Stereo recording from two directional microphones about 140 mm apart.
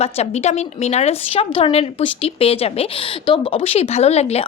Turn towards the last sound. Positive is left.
turn(degrees=50)  # may be behind; listen again after turning